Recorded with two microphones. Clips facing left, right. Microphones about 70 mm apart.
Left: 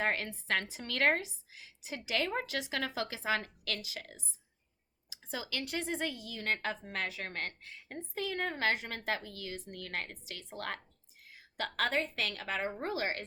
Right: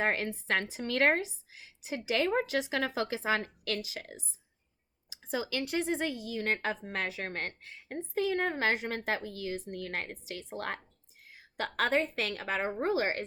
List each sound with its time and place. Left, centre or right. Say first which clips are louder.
0.0 s speech: right 3 dB; right